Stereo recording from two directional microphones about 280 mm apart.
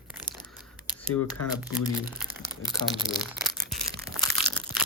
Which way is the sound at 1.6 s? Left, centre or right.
Centre.